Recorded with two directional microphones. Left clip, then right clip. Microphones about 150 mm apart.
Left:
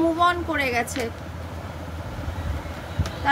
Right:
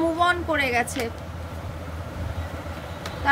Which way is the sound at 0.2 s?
25° right (ahead or behind).